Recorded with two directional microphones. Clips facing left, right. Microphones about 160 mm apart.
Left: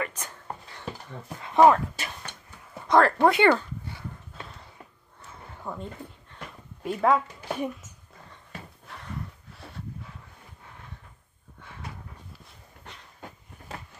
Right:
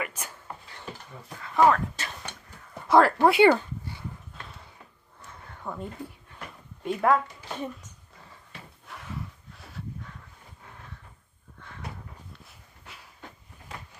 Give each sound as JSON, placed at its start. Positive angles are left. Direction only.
{"t": 0.0, "sound": "speech", "side_deg": -10}
{"t": 1.4, "sound": "speech", "side_deg": 20}
{"t": 2.9, "sound": "speech", "side_deg": -10}
{"t": 5.7, "sound": "speech", "side_deg": 0}
{"t": 8.8, "sound": "a sound", "side_deg": 0}